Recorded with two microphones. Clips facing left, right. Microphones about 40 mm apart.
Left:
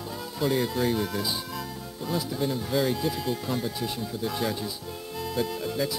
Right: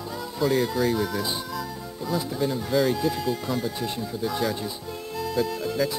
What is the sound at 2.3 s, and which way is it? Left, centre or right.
Speech, centre.